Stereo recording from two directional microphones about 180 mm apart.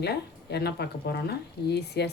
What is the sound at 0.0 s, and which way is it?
Speech, 65° left (ahead or behind).